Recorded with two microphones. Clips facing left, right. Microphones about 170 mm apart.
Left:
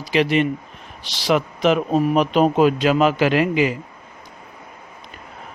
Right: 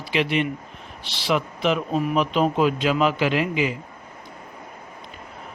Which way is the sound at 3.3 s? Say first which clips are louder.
Left 5 dB; 70° left (ahead or behind).